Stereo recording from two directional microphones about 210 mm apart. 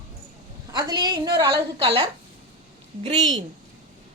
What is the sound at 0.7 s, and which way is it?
A woman's voice, 20° right (ahead or behind).